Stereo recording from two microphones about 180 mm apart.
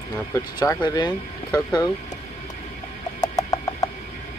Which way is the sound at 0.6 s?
20° left (ahead or behind).